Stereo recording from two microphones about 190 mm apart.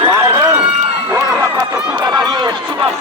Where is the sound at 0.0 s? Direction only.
15° right (ahead or behind).